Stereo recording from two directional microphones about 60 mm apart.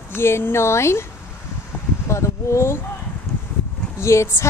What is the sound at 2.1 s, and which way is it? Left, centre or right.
Speech, left.